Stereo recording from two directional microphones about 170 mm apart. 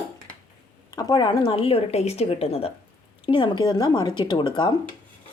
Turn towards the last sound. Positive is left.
turn(degrees=25)  # may be behind; listen again after turning